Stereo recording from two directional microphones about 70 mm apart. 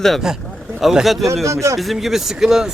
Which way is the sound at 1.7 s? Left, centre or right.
Centre.